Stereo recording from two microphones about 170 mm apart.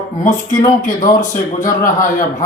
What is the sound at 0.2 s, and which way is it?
A man's voice, 50° left (ahead or behind).